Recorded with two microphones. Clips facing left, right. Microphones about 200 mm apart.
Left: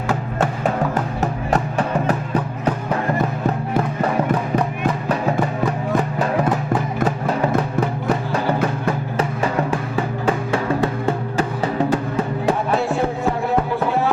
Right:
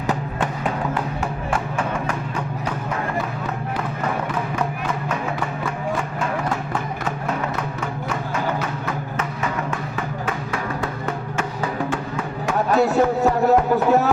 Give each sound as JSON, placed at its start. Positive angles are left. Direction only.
{"t": 0.3, "sound": "music", "side_deg": 40}
{"t": 5.6, "sound": "music", "side_deg": 35}
{"t": 12.7, "sound": "a sound", "side_deg": -40}